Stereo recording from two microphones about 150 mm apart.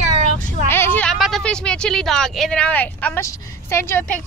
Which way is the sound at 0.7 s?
15° left (ahead or behind).